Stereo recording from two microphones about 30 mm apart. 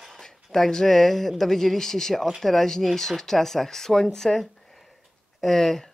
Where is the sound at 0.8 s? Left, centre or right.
Centre.